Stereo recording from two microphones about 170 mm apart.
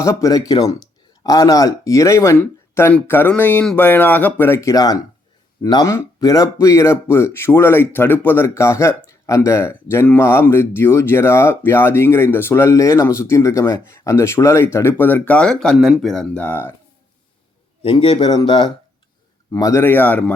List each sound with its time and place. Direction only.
0.0 s speech: 20° left (ahead or behind)
17.8 s speech: 30° left (ahead or behind); by 20.3 s 10° left (ahead or behind)